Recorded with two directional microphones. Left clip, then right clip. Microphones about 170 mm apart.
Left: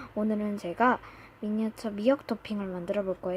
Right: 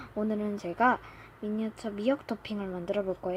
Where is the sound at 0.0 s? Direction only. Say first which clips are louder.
Left 1 dB; 10° left (ahead or behind).